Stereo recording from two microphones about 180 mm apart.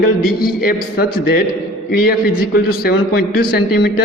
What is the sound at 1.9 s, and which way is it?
A man's voice, 55° left (ahead or behind).